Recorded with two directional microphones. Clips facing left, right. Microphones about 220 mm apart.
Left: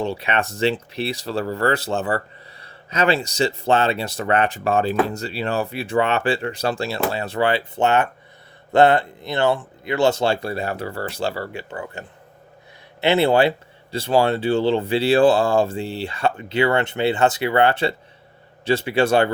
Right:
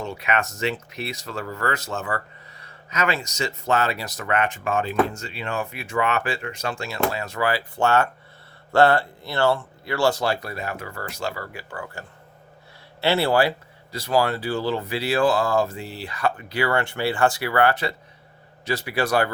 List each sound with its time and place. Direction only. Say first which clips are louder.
0.0 s speech: left 3 dB; 30° left (ahead or behind)